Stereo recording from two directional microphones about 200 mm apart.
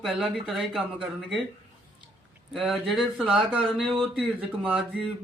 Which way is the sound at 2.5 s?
Centre (ahead or behind).